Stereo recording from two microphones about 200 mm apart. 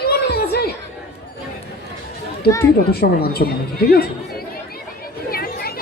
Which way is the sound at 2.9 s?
50° left (ahead or behind).